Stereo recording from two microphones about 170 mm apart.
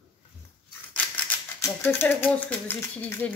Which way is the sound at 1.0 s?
15° left (ahead or behind).